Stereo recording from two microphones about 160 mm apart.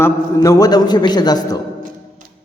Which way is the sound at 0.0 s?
20° left (ahead or behind).